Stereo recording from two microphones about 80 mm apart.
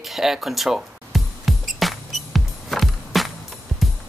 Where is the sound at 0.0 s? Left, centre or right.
Centre.